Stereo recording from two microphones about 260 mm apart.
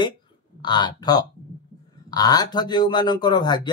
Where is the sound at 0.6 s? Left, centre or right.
Centre.